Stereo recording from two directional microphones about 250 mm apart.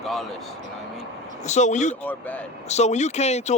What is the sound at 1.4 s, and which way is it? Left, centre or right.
Speech, left.